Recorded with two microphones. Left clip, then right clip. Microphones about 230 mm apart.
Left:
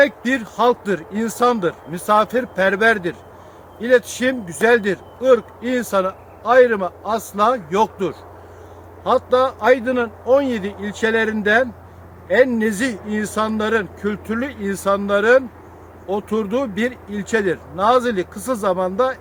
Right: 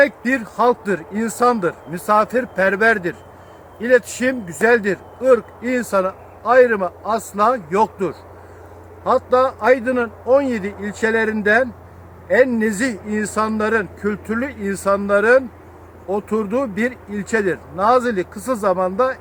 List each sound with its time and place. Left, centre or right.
0.0 s speech: centre